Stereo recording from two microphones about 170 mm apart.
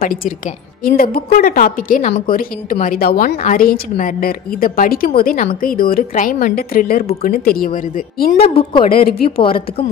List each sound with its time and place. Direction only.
0.0 s a woman's voice: 55° left (ahead or behind)
8.4 s a woman's voice: 35° left (ahead or behind)
8.8 s a woman's voice: 60° left (ahead or behind)
9.4 s a woman's voice: 30° left (ahead or behind)